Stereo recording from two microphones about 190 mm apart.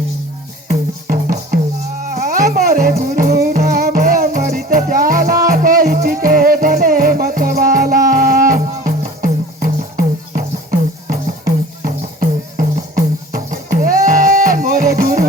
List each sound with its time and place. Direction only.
0.7 s music: 45° right (ahead or behind)